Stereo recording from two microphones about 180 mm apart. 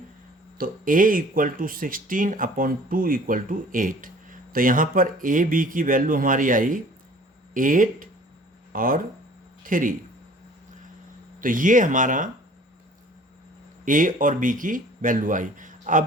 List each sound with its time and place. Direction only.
0.6 s speech: 50° right (ahead or behind)
11.3 s speech: 50° right (ahead or behind)
13.8 s speech: 45° right (ahead or behind)